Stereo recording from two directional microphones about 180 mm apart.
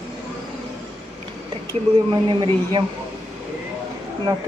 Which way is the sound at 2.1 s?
25° right (ahead or behind).